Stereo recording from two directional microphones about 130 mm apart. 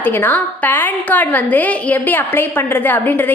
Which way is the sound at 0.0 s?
15° left (ahead or behind).